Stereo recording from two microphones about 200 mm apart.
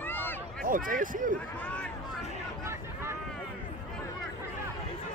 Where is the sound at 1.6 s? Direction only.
5° left (ahead or behind).